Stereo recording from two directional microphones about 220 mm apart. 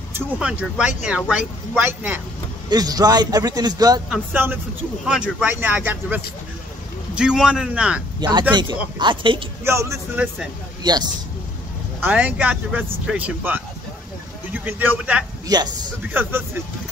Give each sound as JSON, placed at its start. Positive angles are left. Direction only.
{"t": 0.1, "sound": "speech", "side_deg": -5}
{"t": 8.2, "sound": "speech", "side_deg": -20}
{"t": 10.8, "sound": "speech", "side_deg": -20}
{"t": 12.0, "sound": "speech", "side_deg": -5}
{"t": 15.4, "sound": "a man's voice", "side_deg": -20}